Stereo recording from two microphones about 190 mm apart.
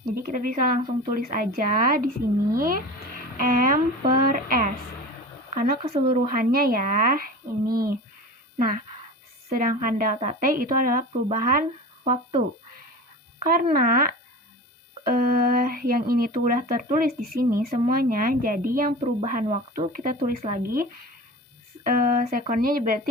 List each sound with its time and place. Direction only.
0.0 s a woman's voice: 45° right (ahead or behind)
13.4 s a woman's voice: 50° right (ahead or behind)
21.8 s a woman's voice: 45° right (ahead or behind)